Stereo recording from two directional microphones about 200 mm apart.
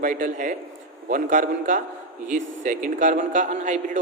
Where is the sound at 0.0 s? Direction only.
40° right (ahead or behind).